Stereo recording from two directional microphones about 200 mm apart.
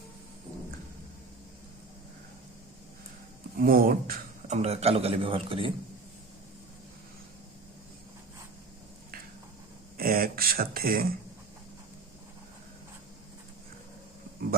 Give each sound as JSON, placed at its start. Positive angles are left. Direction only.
{"t": 3.6, "sound": "speech", "side_deg": -45}
{"t": 4.5, "sound": "a man's voice", "side_deg": -30}
{"t": 10.0, "sound": "a sound", "side_deg": -45}